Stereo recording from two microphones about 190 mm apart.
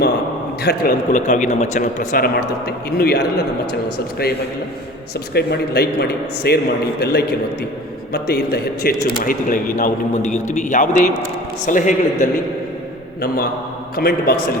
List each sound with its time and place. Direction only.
0.6 s speech: 55° left (ahead or behind)
5.3 s a man's voice: 55° left (ahead or behind)
13.9 s speech: 55° left (ahead or behind)